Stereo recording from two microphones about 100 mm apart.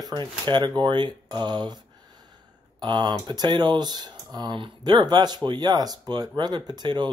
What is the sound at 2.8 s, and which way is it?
Speech, 45° right (ahead or behind).